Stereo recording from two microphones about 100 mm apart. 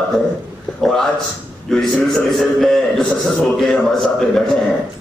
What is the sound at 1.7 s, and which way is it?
A man's voice, 5° left (ahead or behind).